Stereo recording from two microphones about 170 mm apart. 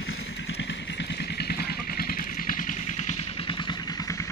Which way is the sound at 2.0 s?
60° left (ahead or behind).